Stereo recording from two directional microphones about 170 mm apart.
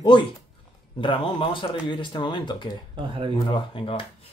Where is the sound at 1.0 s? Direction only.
30° left (ahead or behind).